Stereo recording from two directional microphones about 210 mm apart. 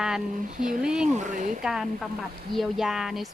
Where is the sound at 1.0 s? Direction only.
35° right (ahead or behind).